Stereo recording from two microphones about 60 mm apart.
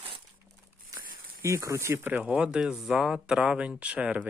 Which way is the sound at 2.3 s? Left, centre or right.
Centre.